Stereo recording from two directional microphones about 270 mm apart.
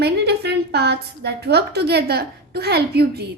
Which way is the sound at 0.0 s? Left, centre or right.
Right.